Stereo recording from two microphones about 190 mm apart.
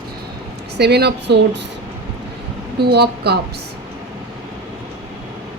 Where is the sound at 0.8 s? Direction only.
60° right (ahead or behind).